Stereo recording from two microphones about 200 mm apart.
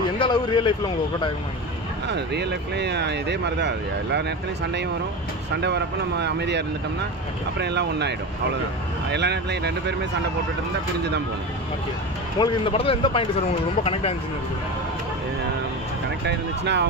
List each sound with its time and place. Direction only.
0.2 s speech: 25° left (ahead or behind)
2.0 s speech: 60° right (ahead or behind)
5.6 s speech: 60° right (ahead or behind)
9.1 s speech: 55° right (ahead or behind)
12.4 s speech: 25° left (ahead or behind)
16.3 s speech: 60° right (ahead or behind)